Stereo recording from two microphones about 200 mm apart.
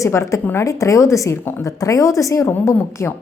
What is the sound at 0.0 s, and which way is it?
A woman's voice, 15° left (ahead or behind).